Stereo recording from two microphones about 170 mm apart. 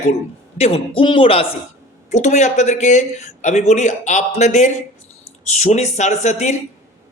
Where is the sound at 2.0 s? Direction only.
45° left (ahead or behind).